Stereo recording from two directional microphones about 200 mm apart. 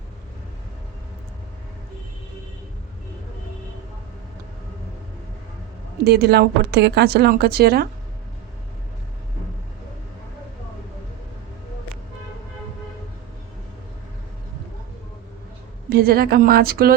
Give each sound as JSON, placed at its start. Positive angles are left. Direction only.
{"t": 6.1, "sound": "speech", "side_deg": -50}
{"t": 15.9, "sound": "speech", "side_deg": -50}